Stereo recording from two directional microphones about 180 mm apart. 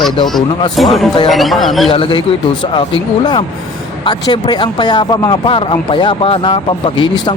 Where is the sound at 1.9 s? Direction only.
30° left (ahead or behind).